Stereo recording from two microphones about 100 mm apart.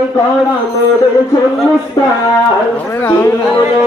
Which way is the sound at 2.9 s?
25° left (ahead or behind).